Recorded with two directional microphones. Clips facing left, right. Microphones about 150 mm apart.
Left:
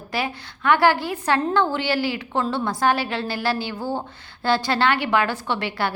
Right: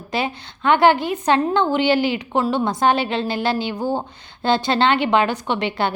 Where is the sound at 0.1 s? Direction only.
20° right (ahead or behind).